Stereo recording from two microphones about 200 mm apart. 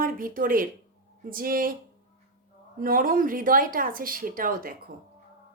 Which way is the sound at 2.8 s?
45° right (ahead or behind).